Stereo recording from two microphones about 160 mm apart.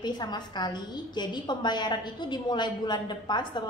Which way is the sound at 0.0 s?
25° left (ahead or behind).